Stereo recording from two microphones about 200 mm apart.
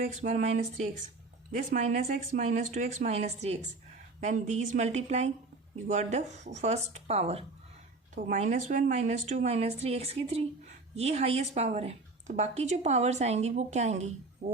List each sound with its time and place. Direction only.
0.0 s a woman's voice: 35° right (ahead or behind)
14.4 s speech: 50° right (ahead or behind)